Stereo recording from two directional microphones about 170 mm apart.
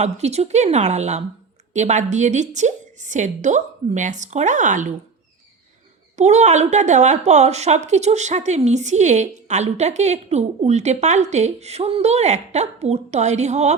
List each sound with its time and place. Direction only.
0.0 s a woman's voice: 40° right (ahead or behind)
6.1 s a woman's voice: 40° right (ahead or behind)